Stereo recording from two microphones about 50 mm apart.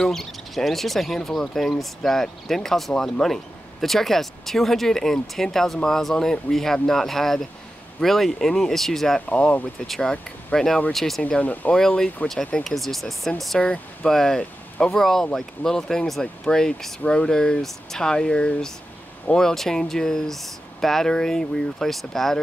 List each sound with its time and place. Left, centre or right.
0.0 s speech: centre
9.3 s speech: left
9.8 s speech: centre
11.2 s speech: left
12.6 s speech: centre
13.6 s speech: centre